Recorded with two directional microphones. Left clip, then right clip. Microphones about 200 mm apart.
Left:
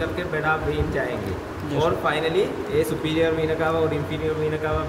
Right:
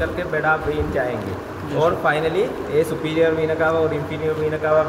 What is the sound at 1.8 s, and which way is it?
Speech, 65° left (ahead or behind).